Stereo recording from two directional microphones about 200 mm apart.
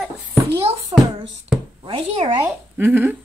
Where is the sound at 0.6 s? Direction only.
25° right (ahead or behind).